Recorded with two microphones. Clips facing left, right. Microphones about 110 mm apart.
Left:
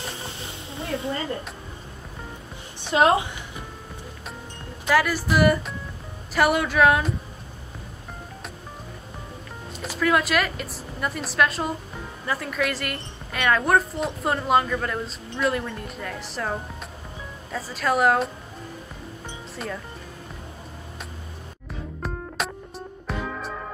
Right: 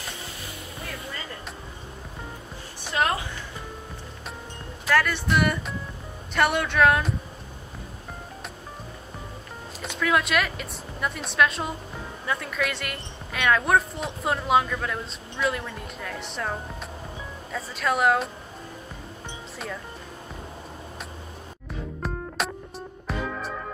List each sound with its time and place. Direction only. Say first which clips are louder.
0.2 s music: left 2 dB; 25° left (ahead or behind)
2.9 s a woman's voice: left 7 dB; 25° left (ahead or behind)
4.8 s a woman's voice: left 2 dB; 5° left (ahead or behind)
9.8 s a woman's voice: left 2 dB; centre (ahead or behind)
22.0 s music: even; centre (ahead or behind)